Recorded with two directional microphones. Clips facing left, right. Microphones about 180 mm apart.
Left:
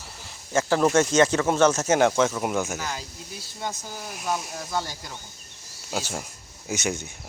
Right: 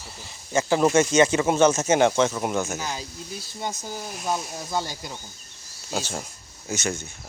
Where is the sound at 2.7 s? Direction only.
15° right (ahead or behind).